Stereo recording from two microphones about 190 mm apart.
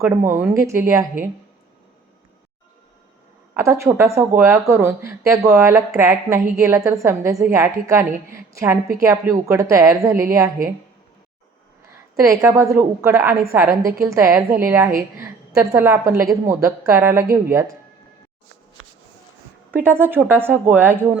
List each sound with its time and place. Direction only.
0.0 s a woman's voice: 10° right (ahead or behind)
3.5 s a woman's voice: 15° right (ahead or behind)
5.5 s a woman's voice: 5° right (ahead or behind)
12.1 s a woman's voice: 15° right (ahead or behind)
19.7 s a woman's voice: 10° right (ahead or behind)